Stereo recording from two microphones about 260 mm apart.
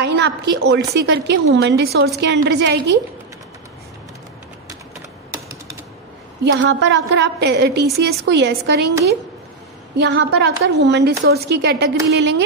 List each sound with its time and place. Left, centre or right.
0.0 s a sound: right
0.7 s a woman's voice: right
6.4 s a woman's voice: right
9.9 s a woman's voice: right